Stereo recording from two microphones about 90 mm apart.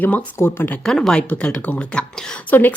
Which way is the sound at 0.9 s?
5° left (ahead or behind).